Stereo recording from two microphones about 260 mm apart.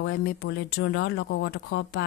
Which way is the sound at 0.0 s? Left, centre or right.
Left.